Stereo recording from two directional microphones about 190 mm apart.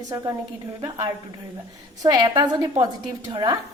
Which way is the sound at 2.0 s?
20° right (ahead or behind).